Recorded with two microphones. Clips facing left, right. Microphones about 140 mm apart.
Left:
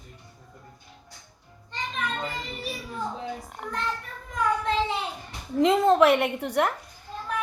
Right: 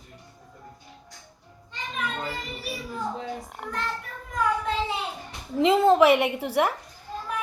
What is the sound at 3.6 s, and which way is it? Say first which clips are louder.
Speech: even; 5° right (ahead or behind).